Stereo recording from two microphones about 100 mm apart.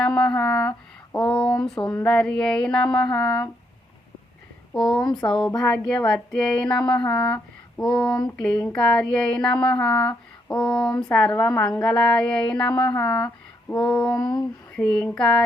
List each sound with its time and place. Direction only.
0.0 s speech: 10° left (ahead or behind)
4.7 s speech: 5° left (ahead or behind)
14.2 s a sound: 50° left (ahead or behind)
14.7 s speech: 10° left (ahead or behind)